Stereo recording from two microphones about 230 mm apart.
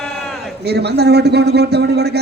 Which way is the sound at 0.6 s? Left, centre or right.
Right.